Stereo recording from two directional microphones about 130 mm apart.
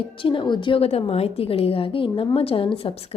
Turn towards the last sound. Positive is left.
turn(degrees=50)  # may be behind; listen again after turning